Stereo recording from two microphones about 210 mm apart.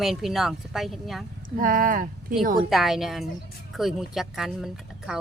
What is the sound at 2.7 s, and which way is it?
Speech, centre (ahead or behind).